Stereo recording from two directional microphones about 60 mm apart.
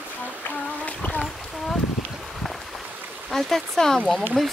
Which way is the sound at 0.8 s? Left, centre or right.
Left.